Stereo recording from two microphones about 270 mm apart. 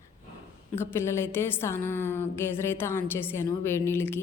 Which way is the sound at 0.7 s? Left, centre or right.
Centre.